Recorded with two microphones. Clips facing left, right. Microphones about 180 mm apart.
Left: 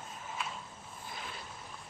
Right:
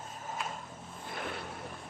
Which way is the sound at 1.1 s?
60° right (ahead or behind).